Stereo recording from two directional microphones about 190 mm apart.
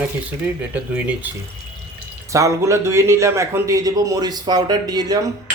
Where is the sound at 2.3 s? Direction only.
15° right (ahead or behind).